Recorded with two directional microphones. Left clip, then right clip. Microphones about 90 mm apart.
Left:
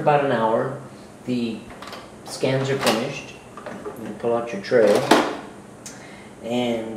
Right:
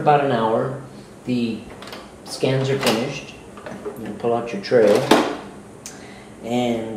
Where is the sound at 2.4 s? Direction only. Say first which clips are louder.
Right 1 dB; centre (ahead or behind).